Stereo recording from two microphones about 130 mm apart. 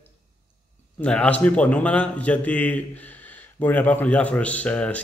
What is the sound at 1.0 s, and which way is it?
A man's voice, 10° left (ahead or behind).